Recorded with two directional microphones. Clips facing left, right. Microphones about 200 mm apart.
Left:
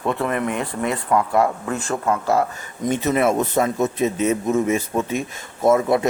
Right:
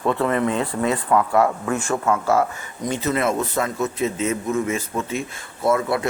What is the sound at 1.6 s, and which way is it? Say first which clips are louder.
Speech: right 2 dB; 35° left (ahead or behind).